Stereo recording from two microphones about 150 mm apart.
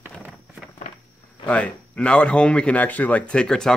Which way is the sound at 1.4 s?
10° left (ahead or behind).